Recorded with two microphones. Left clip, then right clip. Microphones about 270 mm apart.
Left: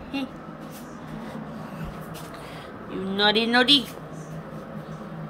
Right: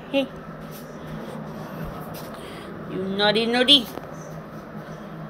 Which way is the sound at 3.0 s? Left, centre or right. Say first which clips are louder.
Right 1 dB; centre.